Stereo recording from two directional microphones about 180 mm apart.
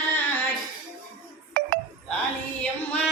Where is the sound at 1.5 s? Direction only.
60° right (ahead or behind).